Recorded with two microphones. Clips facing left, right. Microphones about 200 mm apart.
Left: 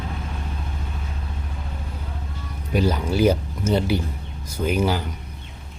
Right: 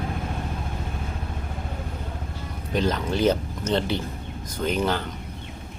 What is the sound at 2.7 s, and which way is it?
Speech, 10° left (ahead or behind).